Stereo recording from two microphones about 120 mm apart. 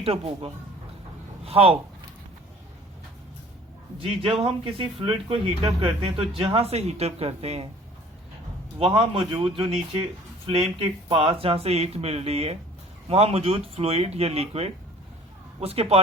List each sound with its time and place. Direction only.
0.0 s speech: 50° right (ahead or behind)
4.0 s speech: 50° right (ahead or behind)
8.8 s speech: 45° right (ahead or behind)